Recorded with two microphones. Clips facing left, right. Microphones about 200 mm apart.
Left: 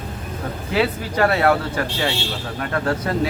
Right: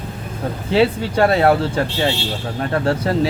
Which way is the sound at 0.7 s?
30° right (ahead or behind).